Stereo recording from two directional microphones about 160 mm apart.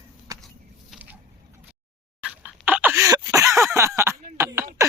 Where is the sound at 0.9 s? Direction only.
10° right (ahead or behind).